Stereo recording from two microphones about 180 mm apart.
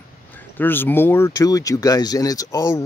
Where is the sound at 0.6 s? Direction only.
10° left (ahead or behind).